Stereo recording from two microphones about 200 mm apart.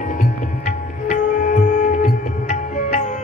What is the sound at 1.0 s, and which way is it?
Music, 40° left (ahead or behind).